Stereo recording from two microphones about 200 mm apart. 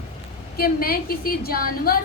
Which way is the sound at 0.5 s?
50° left (ahead or behind).